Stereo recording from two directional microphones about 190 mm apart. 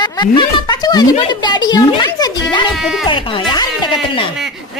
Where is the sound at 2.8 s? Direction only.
Centre (ahead or behind).